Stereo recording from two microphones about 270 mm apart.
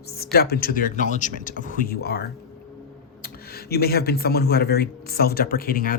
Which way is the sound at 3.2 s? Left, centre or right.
Left.